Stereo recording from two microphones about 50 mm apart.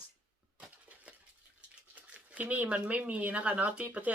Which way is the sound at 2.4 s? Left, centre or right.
Right.